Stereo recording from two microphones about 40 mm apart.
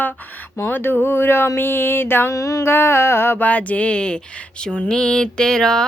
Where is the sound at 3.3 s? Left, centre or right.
Left.